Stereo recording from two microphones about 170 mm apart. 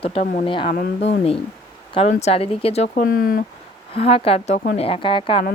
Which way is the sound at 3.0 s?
55° left (ahead or behind).